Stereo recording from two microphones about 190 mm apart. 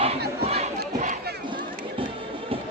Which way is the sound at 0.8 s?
45° right (ahead or behind).